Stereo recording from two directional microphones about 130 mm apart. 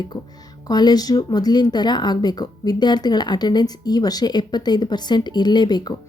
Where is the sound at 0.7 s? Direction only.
30° left (ahead or behind).